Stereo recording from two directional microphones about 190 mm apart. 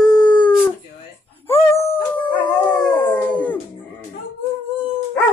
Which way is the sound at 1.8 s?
30° left (ahead or behind).